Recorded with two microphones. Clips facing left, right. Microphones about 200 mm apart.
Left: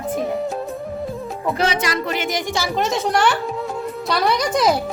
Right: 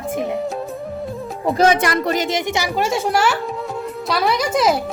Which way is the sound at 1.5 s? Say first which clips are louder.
Right 5 dB; 45° right (ahead or behind).